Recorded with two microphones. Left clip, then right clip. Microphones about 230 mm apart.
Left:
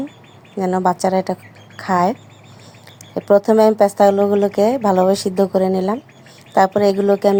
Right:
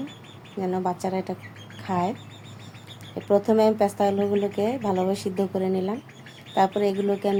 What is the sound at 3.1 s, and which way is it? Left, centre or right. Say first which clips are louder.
Speech: left 8 dB; left.